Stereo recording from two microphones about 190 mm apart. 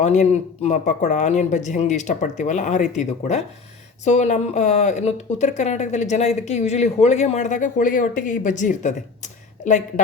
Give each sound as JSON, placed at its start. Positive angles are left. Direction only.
{"t": 0.0, "sound": "speech", "side_deg": 40}